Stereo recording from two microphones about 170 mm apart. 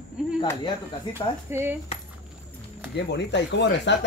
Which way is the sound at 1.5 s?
15° right (ahead or behind).